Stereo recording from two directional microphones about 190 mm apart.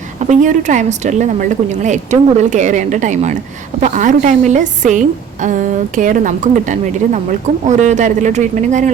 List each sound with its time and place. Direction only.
0.2 s a woman's voice: 40° right (ahead or behind)